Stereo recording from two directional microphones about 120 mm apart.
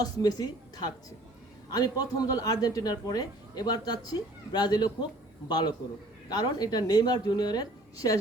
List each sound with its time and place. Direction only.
0.0 s speech: 35° left (ahead or behind)